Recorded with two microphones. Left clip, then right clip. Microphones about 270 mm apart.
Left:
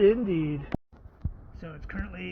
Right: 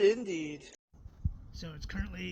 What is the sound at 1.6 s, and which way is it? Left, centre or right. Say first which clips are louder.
Speech: left 4 dB; right.